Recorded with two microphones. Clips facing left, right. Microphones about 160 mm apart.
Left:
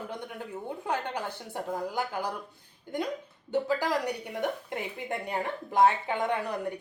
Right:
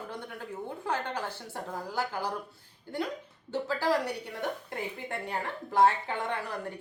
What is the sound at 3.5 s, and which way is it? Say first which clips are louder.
Speech: left 3 dB; 15° left (ahead or behind).